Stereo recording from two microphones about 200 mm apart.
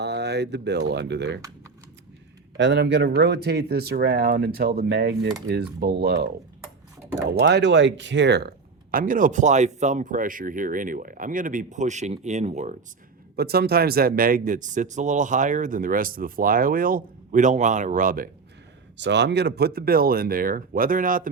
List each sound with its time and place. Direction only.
0.0 s speech: 55° right (ahead or behind)
2.6 s speech: 60° right (ahead or behind); by 12.7 s 35° right (ahead or behind)
13.3 s speech: 50° right (ahead or behind)
18.9 s speech: 60° right (ahead or behind); by 21.2 s 45° right (ahead or behind)